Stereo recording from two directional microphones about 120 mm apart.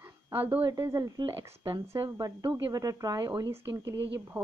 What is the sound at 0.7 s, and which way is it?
Speech, 30° right (ahead or behind).